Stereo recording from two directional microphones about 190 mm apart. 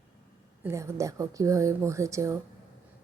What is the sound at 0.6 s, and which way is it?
A woman's voice, 15° right (ahead or behind).